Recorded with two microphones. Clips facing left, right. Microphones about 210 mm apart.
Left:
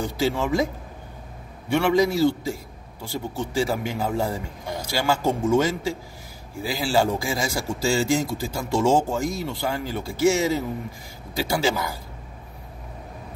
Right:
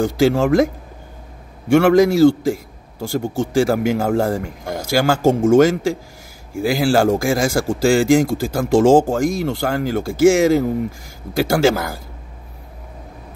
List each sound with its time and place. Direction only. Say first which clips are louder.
0.0 s a man's voice: right 9 dB; 85° right
1.7 s a man's voice: right 8 dB; 80° right
5.3 s speech: right 8 dB; 50° right (ahead or behind)
5.6 s speech: right 10 dB; 90° right